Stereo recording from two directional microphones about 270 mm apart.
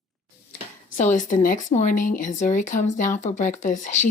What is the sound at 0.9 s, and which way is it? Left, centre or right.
Speech, left.